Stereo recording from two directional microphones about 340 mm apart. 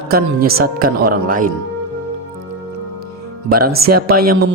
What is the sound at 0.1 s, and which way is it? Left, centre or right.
Speech, right.